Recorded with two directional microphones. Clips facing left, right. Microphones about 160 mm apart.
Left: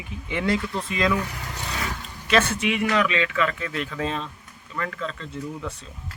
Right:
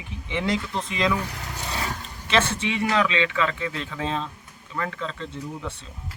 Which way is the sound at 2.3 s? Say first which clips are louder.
Left 2 dB; 25° right (ahead or behind).